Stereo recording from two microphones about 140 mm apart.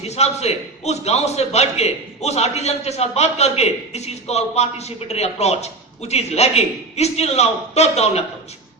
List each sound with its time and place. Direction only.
0.0 s a man's voice: 50° left (ahead or behind)